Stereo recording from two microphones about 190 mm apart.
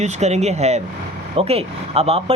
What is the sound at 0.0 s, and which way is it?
Speech, 35° right (ahead or behind).